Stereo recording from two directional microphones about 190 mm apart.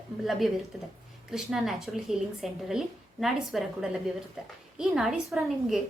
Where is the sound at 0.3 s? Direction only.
Centre (ahead or behind).